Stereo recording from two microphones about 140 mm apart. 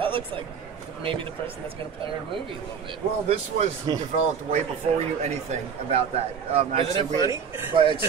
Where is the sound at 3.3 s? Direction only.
50° right (ahead or behind).